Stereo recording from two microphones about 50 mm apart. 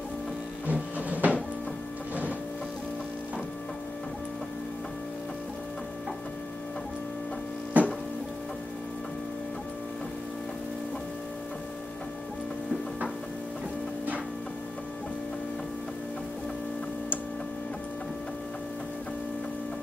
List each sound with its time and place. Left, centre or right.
0.7 s printer: right
7.8 s music: right